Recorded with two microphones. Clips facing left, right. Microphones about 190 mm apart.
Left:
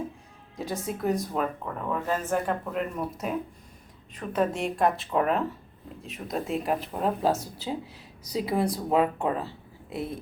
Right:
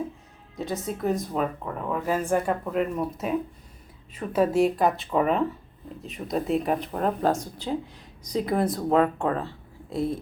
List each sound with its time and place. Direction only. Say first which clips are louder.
0.5 s speech: right 2 dB; centre (ahead or behind)
9.0 s speech: right 1 dB; 10° left (ahead or behind)